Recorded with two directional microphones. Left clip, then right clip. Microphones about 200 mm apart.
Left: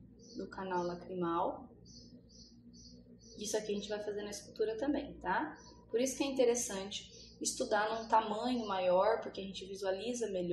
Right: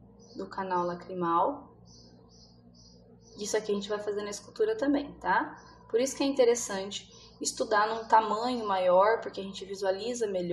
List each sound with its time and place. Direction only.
0.6 s a woman's voice: 15° right (ahead or behind)
3.3 s a woman's voice: 15° right (ahead or behind)